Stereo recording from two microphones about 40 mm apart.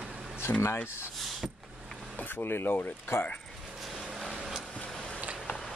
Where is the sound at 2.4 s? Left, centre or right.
Left.